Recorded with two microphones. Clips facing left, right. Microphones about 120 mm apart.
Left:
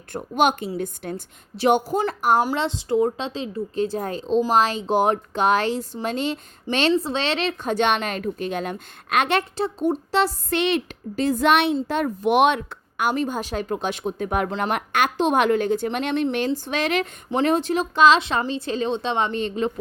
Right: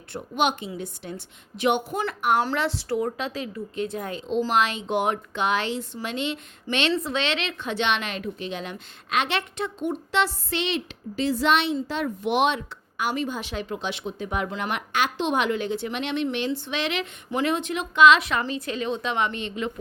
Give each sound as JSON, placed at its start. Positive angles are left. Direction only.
{"t": 0.1, "sound": "speech", "side_deg": 45}
{"t": 1.5, "sound": "a woman's voice", "side_deg": 35}
{"t": 2.6, "sound": "a woman's voice", "side_deg": 20}
{"t": 9.6, "sound": "a woman's voice", "side_deg": 35}